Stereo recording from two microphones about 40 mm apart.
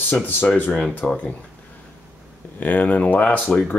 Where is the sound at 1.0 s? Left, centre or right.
Left.